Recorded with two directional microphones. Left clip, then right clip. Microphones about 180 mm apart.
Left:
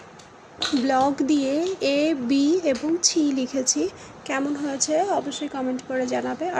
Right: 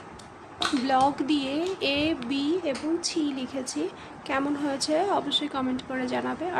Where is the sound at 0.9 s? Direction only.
25° left (ahead or behind).